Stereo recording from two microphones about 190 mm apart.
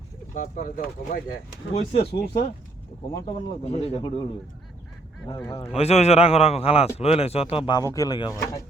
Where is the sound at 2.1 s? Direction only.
60° left (ahead or behind).